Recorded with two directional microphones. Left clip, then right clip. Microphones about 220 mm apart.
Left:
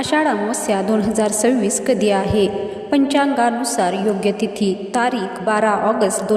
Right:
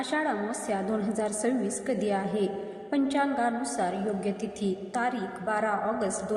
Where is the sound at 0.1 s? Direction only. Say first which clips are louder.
Left 13 dB; 45° left (ahead or behind).